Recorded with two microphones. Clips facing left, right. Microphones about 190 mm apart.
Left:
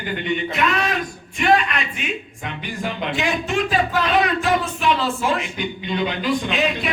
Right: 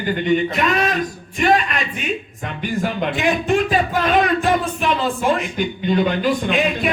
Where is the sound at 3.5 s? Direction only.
50° right (ahead or behind).